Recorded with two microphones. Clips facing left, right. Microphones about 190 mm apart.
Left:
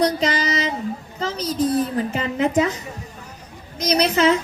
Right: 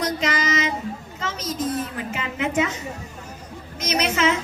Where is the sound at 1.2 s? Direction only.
35° left (ahead or behind).